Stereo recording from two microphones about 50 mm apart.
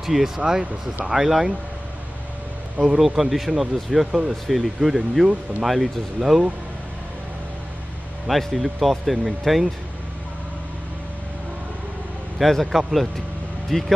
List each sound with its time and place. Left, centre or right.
0.0 s speech: centre
3.2 s speech: centre
8.3 s speech: centre
12.4 s speech: centre